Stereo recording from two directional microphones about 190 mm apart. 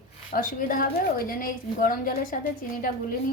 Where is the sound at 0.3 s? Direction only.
45° left (ahead or behind).